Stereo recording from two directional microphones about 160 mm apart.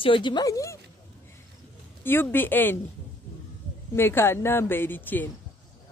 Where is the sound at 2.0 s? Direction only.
15° left (ahead or behind).